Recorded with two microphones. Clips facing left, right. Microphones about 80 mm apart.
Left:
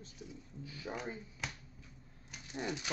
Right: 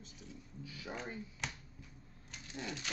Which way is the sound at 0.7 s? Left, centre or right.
Left.